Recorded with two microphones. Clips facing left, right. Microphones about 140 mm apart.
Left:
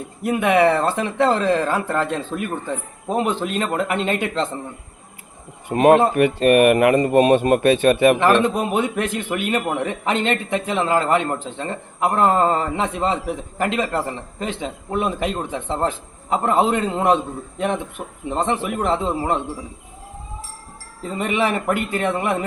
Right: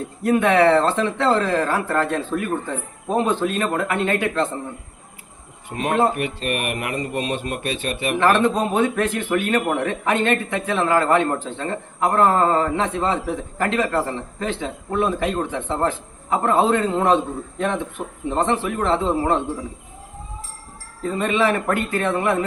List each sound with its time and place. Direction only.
0.2 s a man's voice: 15° left (ahead or behind)
5.7 s speech: 65° left (ahead or behind)
8.2 s a man's voice: 15° left (ahead or behind)
18.3 s a man's voice: 15° left (ahead or behind)
21.0 s a man's voice: 15° left (ahead or behind)